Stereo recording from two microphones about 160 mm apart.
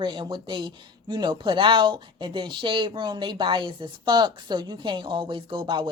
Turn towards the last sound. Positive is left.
turn(degrees=-30)  # may be behind; listen again after turning